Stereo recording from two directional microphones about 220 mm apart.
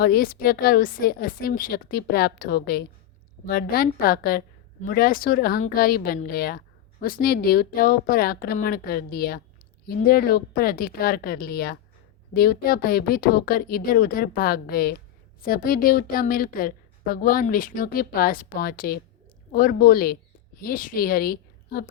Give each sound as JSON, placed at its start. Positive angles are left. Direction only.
{"t": 0.0, "sound": "a woman's voice", "side_deg": 45}